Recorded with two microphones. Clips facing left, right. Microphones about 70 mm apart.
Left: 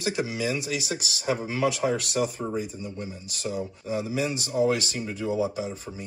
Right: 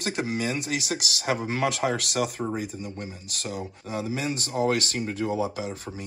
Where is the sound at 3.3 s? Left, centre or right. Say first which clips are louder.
Left 3 dB; right.